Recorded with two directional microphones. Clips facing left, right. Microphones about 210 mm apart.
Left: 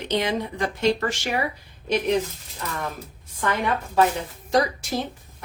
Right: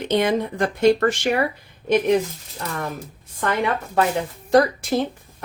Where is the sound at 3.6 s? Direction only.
55° right (ahead or behind).